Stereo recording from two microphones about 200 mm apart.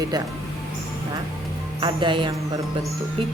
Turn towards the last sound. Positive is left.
turn(degrees=-25)  # may be behind; listen again after turning